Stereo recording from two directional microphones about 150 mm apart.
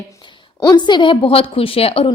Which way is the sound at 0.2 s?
30° left (ahead or behind).